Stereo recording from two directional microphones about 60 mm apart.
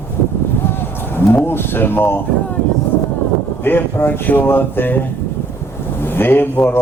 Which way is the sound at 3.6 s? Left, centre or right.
Left.